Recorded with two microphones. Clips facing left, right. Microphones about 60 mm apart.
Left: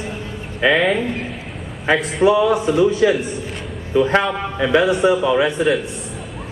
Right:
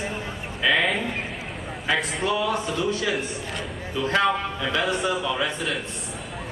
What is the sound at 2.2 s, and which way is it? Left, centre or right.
A man's voice, centre.